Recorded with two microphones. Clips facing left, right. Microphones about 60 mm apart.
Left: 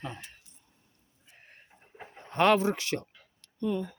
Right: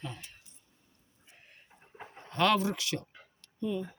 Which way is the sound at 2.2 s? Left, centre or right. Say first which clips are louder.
Left 4 dB; left.